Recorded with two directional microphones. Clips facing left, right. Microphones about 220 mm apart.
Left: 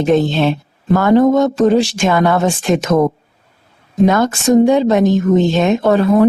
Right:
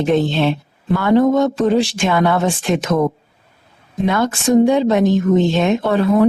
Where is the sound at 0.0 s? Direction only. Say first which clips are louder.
Left 2 dB; 45° left (ahead or behind).